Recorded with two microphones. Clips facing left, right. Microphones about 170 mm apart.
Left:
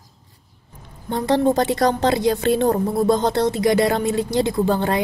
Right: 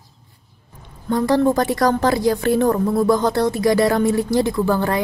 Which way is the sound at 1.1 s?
20° left (ahead or behind).